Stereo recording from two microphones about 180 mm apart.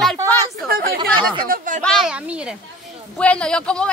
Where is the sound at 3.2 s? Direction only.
5° left (ahead or behind).